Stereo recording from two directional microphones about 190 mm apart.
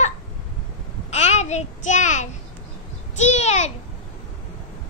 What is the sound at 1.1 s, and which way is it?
A child's voice, 35° left (ahead or behind).